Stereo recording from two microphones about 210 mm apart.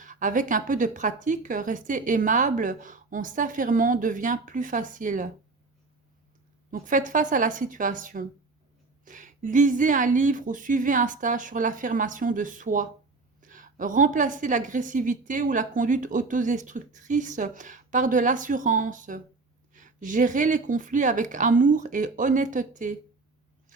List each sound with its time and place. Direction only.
0.0 s a woman's voice: 40° right (ahead or behind)
6.7 s a woman's voice: 40° right (ahead or behind)